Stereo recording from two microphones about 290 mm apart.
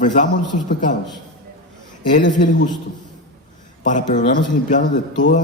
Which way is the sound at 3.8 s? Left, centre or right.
Left.